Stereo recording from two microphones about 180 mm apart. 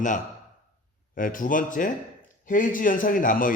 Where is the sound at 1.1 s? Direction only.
50° left (ahead or behind).